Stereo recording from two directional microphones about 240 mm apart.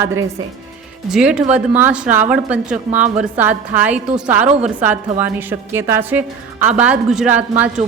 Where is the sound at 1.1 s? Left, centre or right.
Centre.